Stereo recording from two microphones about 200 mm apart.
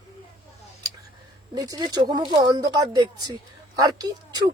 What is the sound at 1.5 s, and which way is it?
Speech, 20° right (ahead or behind).